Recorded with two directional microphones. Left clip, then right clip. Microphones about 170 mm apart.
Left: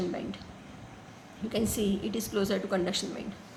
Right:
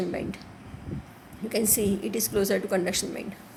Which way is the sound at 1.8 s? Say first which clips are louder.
Right 4 dB; 90° right.